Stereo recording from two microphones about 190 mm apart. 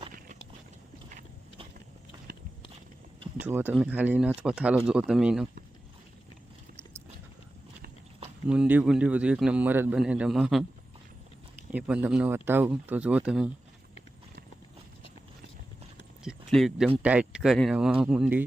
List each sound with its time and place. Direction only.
3.4 s a man's voice: 10° right (ahead or behind)
8.4 s a man's voice: 5° right (ahead or behind)
11.7 s speech: 5° right (ahead or behind)
16.2 s a man's voice: centre (ahead or behind)